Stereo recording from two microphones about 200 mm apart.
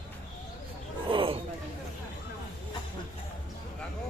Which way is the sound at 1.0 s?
25° right (ahead or behind).